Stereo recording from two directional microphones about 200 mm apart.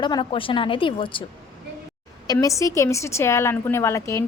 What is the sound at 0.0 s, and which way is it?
A woman's voice, 25° left (ahead or behind).